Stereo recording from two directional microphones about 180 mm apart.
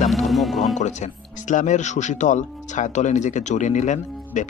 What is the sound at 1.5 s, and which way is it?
Speech, 45° left (ahead or behind).